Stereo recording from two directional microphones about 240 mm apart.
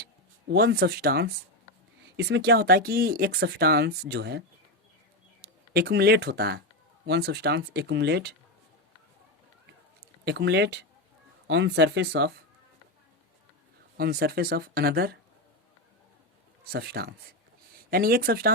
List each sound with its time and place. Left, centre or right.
0.5 s speech: right
10.2 s speech: right
13.9 s speech: right
16.7 s speech: right